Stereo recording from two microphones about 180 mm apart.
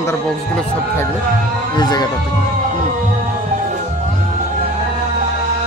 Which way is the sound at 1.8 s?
20° left (ahead or behind).